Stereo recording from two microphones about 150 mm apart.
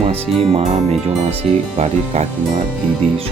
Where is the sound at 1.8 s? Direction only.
45° right (ahead or behind).